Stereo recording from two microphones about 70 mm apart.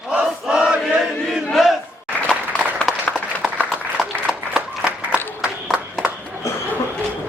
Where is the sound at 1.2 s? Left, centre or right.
Centre.